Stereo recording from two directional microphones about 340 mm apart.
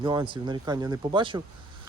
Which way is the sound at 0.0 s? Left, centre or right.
Centre.